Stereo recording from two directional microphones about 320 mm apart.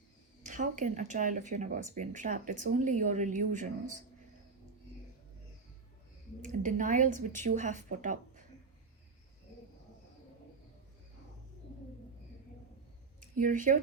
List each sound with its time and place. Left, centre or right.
0.4 s speech: right
6.4 s speech: right
13.3 s speech: right